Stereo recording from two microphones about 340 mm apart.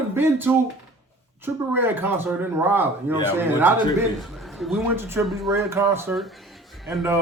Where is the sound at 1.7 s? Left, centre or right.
Centre.